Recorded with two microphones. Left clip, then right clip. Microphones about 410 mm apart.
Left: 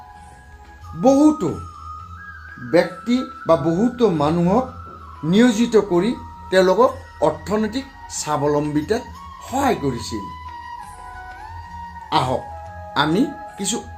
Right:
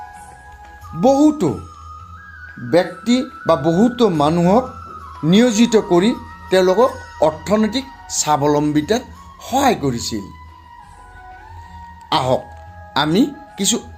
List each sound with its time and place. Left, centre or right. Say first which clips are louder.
1.0 s speech: right 1 dB; right
2.6 s speech: right 2 dB; right
12.0 s music: right 3 dB; right
12.9 s speech: right 2 dB; right